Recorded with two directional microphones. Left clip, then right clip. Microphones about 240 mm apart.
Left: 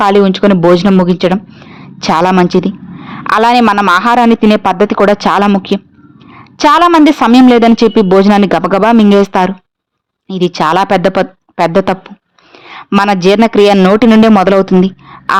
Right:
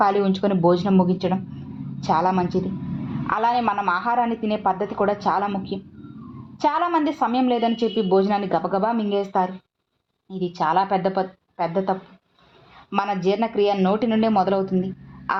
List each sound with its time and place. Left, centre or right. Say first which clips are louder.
0.0 s a woman's voice: left 12 dB; left